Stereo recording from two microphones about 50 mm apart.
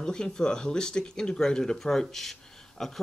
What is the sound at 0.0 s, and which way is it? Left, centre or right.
Speech, centre.